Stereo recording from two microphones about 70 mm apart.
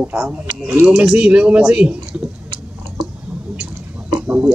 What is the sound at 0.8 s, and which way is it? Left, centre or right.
Speech, centre.